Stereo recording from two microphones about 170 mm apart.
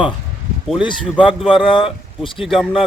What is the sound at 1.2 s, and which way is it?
A man's voice, 5° right (ahead or behind).